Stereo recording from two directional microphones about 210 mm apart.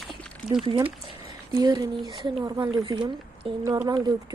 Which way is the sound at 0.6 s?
25° right (ahead or behind).